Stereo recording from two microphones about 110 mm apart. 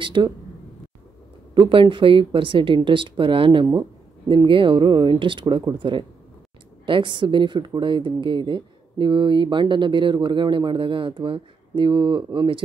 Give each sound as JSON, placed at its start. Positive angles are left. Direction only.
{"t": 0.0, "sound": "a woman's voice", "side_deg": -45}
{"t": 1.5, "sound": "a woman's voice", "side_deg": -50}